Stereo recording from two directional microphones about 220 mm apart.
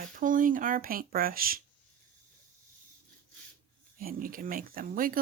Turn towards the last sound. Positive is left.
turn(degrees=-40)  # may be behind; listen again after turning